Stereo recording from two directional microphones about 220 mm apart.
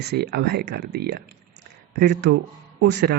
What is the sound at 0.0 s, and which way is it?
Speech, 45° right (ahead or behind).